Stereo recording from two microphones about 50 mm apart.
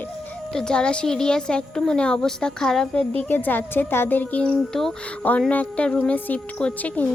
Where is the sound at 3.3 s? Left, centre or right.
Left.